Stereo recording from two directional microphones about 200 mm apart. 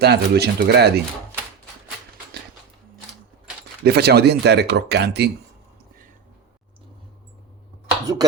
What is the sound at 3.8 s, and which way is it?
Speech, 55° right (ahead or behind).